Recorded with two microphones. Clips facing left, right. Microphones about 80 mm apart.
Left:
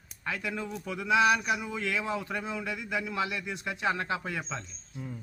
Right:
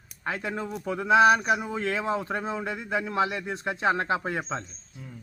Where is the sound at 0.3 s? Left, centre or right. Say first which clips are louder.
Right 3 dB; right.